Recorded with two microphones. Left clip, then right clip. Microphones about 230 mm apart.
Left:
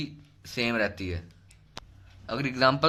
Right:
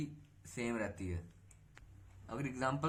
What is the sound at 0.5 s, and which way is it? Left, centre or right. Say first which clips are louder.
Speech: left 13 dB; left.